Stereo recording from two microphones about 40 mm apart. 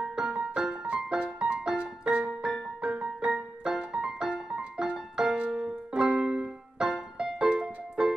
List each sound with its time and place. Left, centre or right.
0.0 s music: centre
4.6 s piano: right
5.1 s music: centre
5.5 s music: centre
5.9 s music: right